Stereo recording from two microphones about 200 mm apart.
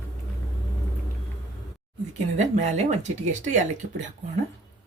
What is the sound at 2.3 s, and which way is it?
Speech, 35° right (ahead or behind).